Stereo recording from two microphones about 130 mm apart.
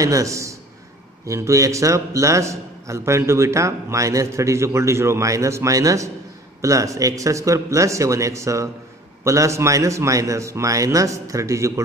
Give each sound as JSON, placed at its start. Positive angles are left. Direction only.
{"t": 0.0, "sound": "a man's voice", "side_deg": -25}